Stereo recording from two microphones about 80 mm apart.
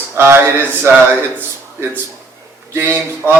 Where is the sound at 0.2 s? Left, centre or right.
Right.